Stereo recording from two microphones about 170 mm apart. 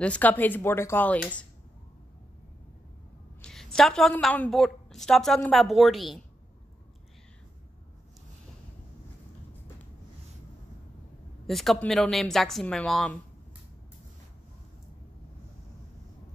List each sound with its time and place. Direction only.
0.0 s speech: 10° left (ahead or behind)
3.4 s a woman's voice: 5° left (ahead or behind)
11.4 s a woman's voice: centre (ahead or behind)